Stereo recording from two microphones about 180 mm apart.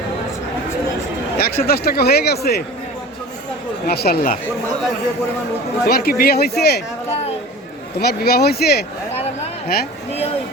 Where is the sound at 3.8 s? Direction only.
60° left (ahead or behind).